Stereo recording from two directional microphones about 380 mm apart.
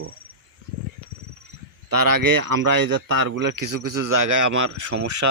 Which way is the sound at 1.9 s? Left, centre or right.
Right.